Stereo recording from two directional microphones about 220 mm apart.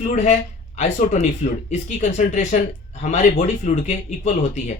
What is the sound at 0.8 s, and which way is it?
Speech, 35° left (ahead or behind).